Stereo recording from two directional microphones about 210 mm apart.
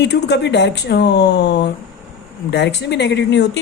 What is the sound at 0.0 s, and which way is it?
A woman's voice, 55° left (ahead or behind).